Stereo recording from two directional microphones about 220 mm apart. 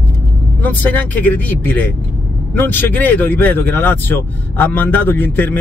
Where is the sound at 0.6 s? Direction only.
10° left (ahead or behind).